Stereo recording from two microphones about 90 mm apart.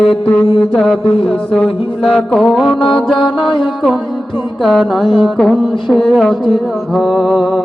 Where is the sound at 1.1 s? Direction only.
90° left.